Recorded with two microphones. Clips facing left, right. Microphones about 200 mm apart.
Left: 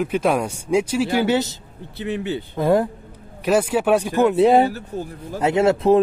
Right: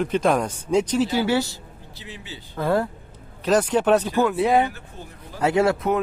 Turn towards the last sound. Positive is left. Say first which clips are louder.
# left 5 dB
turn(degrees=25)  # may be behind; listen again after turning